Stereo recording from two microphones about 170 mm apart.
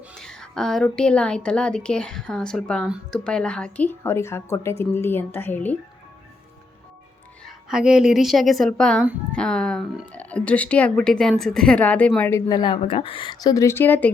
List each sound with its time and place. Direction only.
0.2 s a woman's voice: 5° left (ahead or behind)
7.4 s a woman's voice: 5° right (ahead or behind)
12.5 s speech: 25° left (ahead or behind)